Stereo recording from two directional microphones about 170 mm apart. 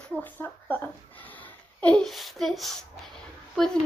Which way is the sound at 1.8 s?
5° left (ahead or behind).